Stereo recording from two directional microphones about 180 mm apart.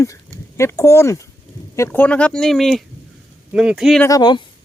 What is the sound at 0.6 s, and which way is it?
Speech, 15° left (ahead or behind).